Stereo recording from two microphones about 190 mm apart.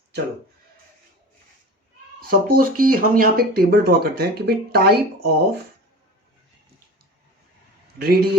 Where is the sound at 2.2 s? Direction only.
50° right (ahead or behind).